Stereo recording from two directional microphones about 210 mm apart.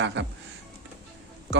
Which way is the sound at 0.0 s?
60° right (ahead or behind).